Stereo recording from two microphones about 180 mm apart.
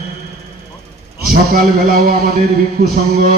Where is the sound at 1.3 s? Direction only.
55° right (ahead or behind).